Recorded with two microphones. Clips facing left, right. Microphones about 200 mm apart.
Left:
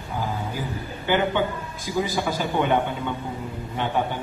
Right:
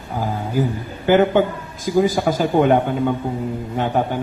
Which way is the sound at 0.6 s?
45° right (ahead or behind).